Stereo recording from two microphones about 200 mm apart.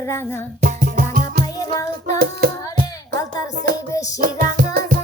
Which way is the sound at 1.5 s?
20° left (ahead or behind).